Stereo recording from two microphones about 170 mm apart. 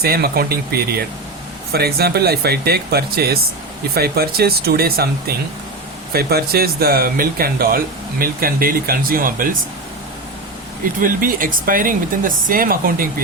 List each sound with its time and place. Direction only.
0.0 s speech: 65° right (ahead or behind)
6.1 s speech: 65° right (ahead or behind)
11.0 s speech: 55° right (ahead or behind)